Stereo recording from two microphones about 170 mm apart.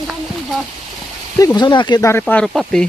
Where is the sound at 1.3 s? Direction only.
20° left (ahead or behind).